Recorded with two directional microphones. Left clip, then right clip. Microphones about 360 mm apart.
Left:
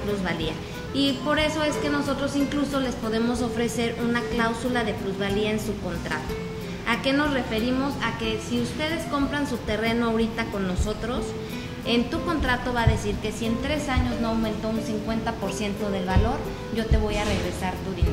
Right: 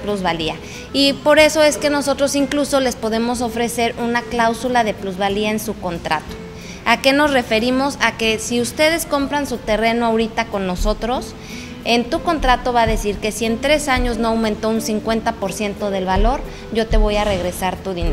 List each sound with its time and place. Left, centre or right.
0.2 s a woman's voice: right
6.9 s a woman's voice: right